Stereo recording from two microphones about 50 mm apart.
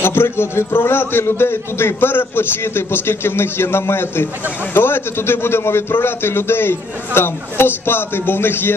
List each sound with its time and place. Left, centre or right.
0.0 s a man's voice: left